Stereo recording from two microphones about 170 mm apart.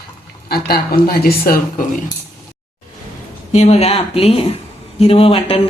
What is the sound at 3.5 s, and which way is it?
Speech, 40° left (ahead or behind).